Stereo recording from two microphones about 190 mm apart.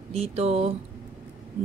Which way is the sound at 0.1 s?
35° right (ahead or behind).